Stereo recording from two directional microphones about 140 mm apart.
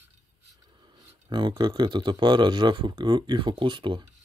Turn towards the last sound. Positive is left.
turn(degrees=-35)  # may be behind; listen again after turning